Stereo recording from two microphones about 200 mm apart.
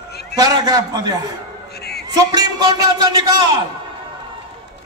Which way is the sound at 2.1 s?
20° right (ahead or behind).